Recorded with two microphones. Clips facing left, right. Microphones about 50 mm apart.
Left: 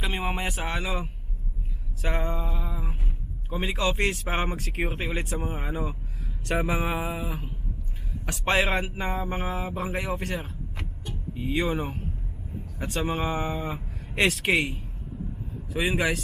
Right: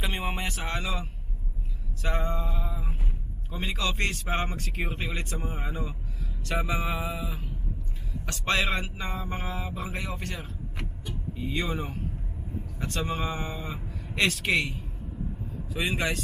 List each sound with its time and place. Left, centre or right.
0.0 s a sound: centre
0.4 s speech: centre
2.0 s a sound: centre
3.5 s speech: centre
8.3 s speech: centre
11.3 s speech: centre
13.1 s speech: left; by 16.2 s centre